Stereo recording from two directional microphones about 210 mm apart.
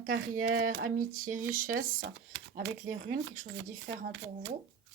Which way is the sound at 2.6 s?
65° right (ahead or behind).